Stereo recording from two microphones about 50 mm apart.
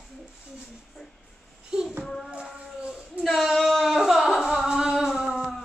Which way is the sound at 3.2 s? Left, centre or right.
Centre.